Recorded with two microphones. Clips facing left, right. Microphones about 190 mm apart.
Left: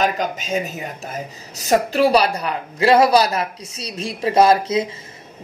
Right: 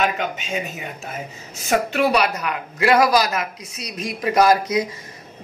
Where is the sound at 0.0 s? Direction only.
40° left (ahead or behind).